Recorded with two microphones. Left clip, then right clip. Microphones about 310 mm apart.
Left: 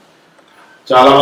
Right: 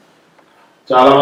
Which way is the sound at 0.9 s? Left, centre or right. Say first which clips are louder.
Left 2 dB; centre.